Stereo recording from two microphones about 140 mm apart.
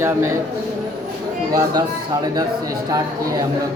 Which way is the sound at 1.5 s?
30° right (ahead or behind).